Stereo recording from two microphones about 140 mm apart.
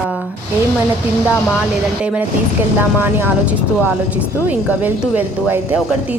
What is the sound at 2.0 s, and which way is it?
A woman's voice, 10° right (ahead or behind).